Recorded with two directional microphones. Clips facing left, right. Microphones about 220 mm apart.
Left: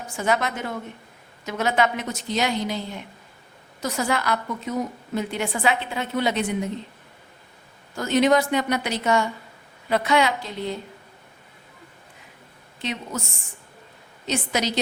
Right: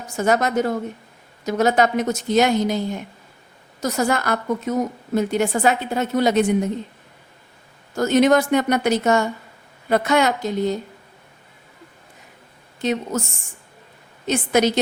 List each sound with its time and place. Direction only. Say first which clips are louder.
0.2 s a woman's voice: right 6 dB; 45° right (ahead or behind)
7.9 s a woman's voice: right 4 dB; 45° right (ahead or behind)
12.8 s a woman's voice: right 8 dB; 45° right (ahead or behind)
14.3 s a woman's voice: right 7 dB; 50° right (ahead or behind)